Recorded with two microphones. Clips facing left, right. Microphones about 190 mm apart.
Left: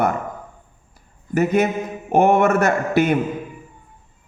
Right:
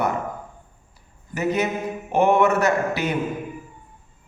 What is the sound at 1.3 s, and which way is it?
A man's voice, 50° left (ahead or behind).